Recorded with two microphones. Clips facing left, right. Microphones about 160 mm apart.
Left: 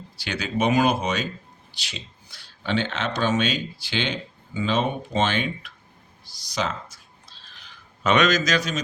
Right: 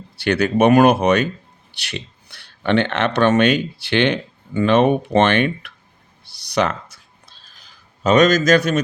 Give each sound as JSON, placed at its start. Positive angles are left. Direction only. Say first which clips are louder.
{"t": 0.2, "sound": "speech", "louder": "right 10 dB", "side_deg": -60}
{"t": 6.2, "sound": "clicking", "louder": "right 8 dB", "side_deg": -65}